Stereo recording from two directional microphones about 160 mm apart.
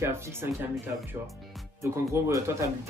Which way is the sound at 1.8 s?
20° right (ahead or behind).